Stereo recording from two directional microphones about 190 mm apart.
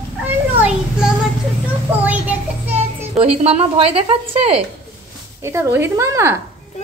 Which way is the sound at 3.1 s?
30° right (ahead or behind).